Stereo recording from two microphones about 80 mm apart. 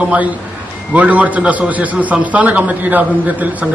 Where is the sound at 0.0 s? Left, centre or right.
Centre.